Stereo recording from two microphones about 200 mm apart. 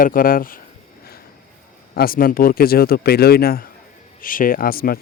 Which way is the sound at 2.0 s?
45° left (ahead or behind).